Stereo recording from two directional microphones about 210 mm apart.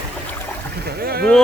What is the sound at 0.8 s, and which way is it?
Boat, 50° right (ahead or behind).